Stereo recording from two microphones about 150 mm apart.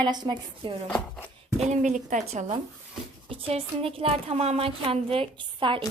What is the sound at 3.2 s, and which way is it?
Speech, 40° right (ahead or behind).